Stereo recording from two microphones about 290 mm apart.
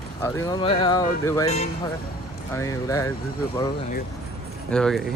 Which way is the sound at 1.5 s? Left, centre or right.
Left.